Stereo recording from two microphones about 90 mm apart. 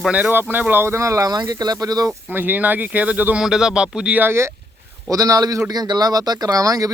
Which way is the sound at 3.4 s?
5° right (ahead or behind).